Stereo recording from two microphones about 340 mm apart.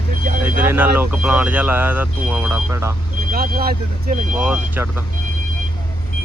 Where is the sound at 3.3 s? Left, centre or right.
Right.